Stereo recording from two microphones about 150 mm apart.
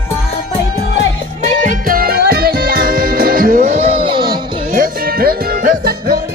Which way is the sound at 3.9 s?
35° right (ahead or behind).